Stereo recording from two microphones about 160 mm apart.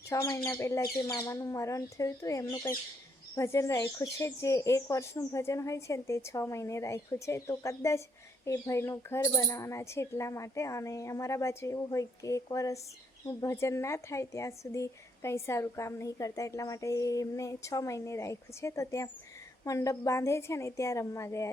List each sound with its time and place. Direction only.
0.1 s speech: 20° left (ahead or behind)